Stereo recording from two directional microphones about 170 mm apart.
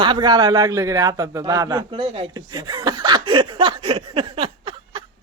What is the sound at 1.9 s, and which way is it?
Speech, 35° right (ahead or behind).